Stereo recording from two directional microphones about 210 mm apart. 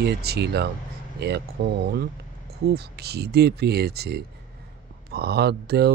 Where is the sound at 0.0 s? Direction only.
50° right (ahead or behind).